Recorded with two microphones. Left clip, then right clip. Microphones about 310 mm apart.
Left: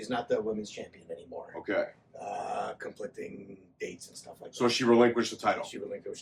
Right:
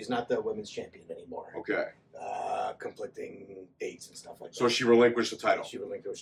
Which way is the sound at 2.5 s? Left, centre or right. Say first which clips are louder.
Right 2 dB; centre.